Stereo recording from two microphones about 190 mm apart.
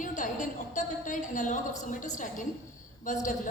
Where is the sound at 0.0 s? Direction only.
40° left (ahead or behind).